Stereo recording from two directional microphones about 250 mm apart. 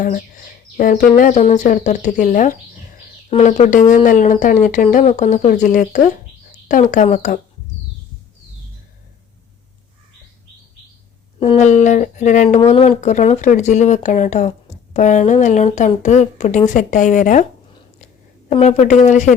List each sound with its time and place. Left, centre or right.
0.0 s speech: left
11.3 s a woman's voice: left